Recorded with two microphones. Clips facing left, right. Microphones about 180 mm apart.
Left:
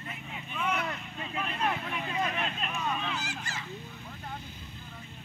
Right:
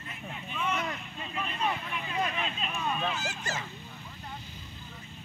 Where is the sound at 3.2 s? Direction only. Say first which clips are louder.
Right 3 dB; 45° right (ahead or behind).